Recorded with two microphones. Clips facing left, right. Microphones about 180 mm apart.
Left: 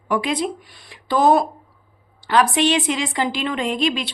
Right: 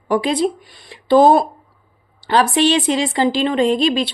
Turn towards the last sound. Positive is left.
turn(degrees=-35)  # may be behind; listen again after turning